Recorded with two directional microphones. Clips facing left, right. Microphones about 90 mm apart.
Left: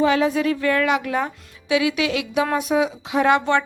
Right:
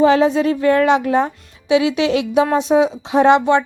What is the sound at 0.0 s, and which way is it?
A woman's voice, 30° right (ahead or behind).